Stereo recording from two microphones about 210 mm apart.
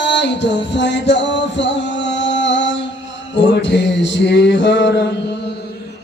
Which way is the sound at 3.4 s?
60° left (ahead or behind).